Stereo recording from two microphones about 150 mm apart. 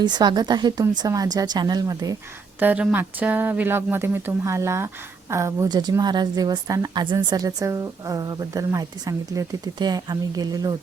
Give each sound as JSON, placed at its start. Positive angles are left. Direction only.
{"t": 0.0, "sound": "a woman's voice", "side_deg": -30}
{"t": 2.6, "sound": "a woman's voice", "side_deg": -10}